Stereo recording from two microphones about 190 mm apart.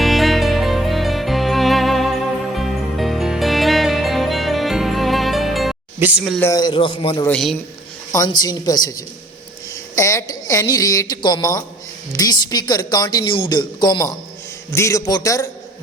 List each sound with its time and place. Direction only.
0.0 s music: centre (ahead or behind)
6.0 s speech: 5° right (ahead or behind)
6.4 s speech: 20° left (ahead or behind)
7.3 s speech: 5° left (ahead or behind)
8.1 s a woman's voice: 20° left (ahead or behind)